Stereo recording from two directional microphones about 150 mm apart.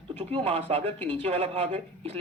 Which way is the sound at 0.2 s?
35° right (ahead or behind).